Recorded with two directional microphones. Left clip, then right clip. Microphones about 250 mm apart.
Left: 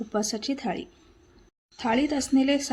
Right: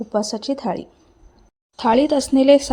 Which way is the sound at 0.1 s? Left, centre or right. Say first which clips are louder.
Right 7 dB; centre.